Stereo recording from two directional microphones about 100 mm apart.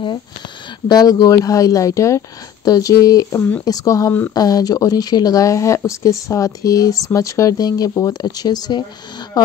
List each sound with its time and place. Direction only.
0.8 s speech: 40° left (ahead or behind)
3.3 s speech: 20° left (ahead or behind)
3.6 s speech: 35° left (ahead or behind)